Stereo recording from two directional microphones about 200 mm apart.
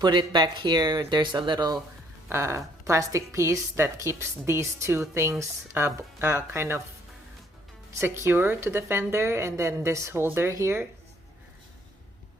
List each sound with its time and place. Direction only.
0.0 s a woman's voice: 20° right (ahead or behind)
7.9 s a woman's voice: 15° right (ahead or behind)